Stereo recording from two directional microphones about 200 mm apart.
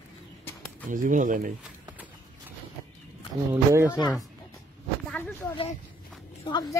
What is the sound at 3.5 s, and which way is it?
Speech, 10° right (ahead or behind).